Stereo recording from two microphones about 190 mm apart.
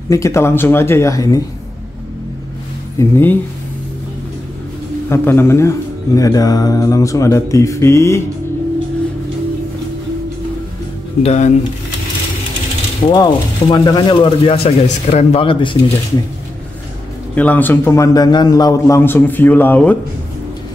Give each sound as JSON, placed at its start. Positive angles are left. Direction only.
{"t": 0.1, "sound": "speech", "side_deg": 15}
{"t": 3.0, "sound": "speech", "side_deg": 10}
{"t": 5.1, "sound": "speech", "side_deg": 10}
{"t": 11.2, "sound": "speech", "side_deg": 40}
{"t": 13.0, "sound": "speech", "side_deg": 20}
{"t": 17.4, "sound": "speech", "side_deg": 10}